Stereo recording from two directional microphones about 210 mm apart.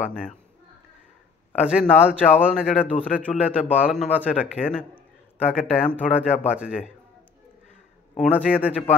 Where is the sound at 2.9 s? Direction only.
10° left (ahead or behind).